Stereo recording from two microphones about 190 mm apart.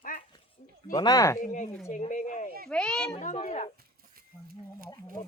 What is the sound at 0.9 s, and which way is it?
Speech, 20° left (ahead or behind).